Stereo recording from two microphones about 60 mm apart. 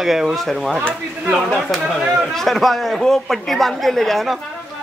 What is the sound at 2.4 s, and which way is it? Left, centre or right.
A woman's voice, centre.